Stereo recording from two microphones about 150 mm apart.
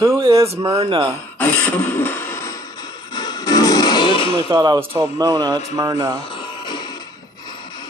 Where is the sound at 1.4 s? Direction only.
15° left (ahead or behind); by 4.4 s 35° left (ahead or behind).